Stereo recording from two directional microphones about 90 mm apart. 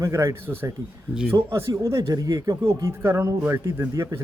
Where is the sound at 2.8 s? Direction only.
25° right (ahead or behind).